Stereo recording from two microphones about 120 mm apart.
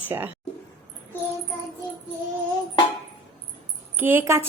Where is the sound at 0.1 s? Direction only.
25° right (ahead or behind).